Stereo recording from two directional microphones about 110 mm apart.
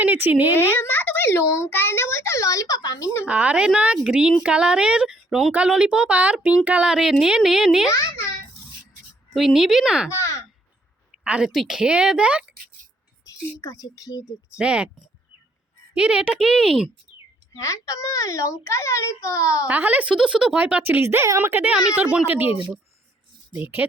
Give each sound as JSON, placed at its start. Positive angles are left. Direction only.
{"t": 0.0, "sound": "speech", "side_deg": -15}
{"t": 0.5, "sound": "a child's voice", "side_deg": 20}
{"t": 3.2, "sound": "a woman's voice", "side_deg": -10}
{"t": 7.9, "sound": "a sound", "side_deg": 30}
{"t": 9.3, "sound": "speech", "side_deg": 0}
{"t": 10.1, "sound": "a child's voice", "side_deg": 25}
{"t": 11.2, "sound": "a woman's voice", "side_deg": -10}
{"t": 13.6, "sound": "speech", "side_deg": 30}
{"t": 14.6, "sound": "a woman's voice", "side_deg": -10}
{"t": 17.6, "sound": "a child's voice", "side_deg": 30}
{"t": 19.6, "sound": "a woman's voice", "side_deg": -15}
{"t": 23.6, "sound": "a woman's voice", "side_deg": -15}